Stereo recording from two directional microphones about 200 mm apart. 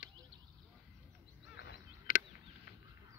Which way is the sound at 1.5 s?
50° left (ahead or behind).